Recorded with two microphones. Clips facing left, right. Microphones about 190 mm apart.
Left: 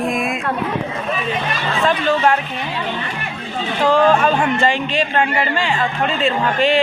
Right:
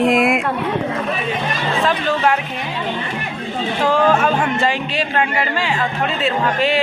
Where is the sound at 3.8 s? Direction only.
10° right (ahead or behind).